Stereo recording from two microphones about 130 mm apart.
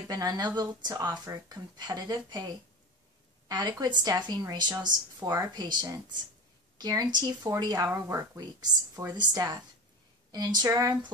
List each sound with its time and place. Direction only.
0.1 s a woman's voice: 30° right (ahead or behind)
8.4 s a woman's voice: 30° right (ahead or behind)